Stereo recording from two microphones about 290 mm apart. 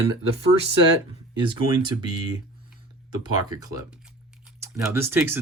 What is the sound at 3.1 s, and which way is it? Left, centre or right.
Speech, centre.